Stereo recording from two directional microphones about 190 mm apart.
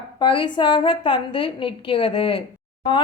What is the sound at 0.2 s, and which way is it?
A woman's voice, 25° left (ahead or behind).